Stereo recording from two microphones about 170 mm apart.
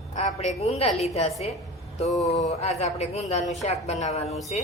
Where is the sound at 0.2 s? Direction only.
40° left (ahead or behind).